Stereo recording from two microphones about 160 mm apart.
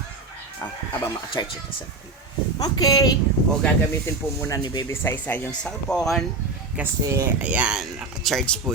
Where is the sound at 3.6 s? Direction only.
5° left (ahead or behind).